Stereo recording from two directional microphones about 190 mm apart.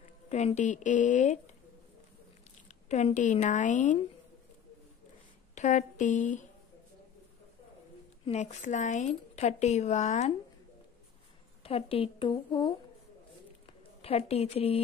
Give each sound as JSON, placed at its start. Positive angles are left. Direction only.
{"t": 0.3, "sound": "speech", "side_deg": 35}
{"t": 2.9, "sound": "speech", "side_deg": 35}
{"t": 5.5, "sound": "speech", "side_deg": 40}
{"t": 8.3, "sound": "speech", "side_deg": 40}
{"t": 11.6, "sound": "a woman's voice", "side_deg": 30}